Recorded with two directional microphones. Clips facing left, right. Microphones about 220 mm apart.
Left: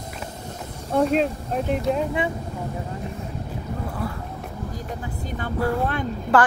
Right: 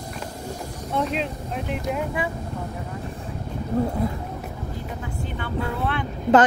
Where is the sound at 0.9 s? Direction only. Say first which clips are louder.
Left 6 dB; 45° left (ahead or behind).